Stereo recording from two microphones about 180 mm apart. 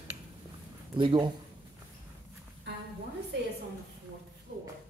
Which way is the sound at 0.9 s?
25° right (ahead or behind).